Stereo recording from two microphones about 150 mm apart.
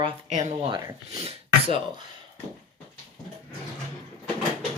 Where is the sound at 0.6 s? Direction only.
30° right (ahead or behind).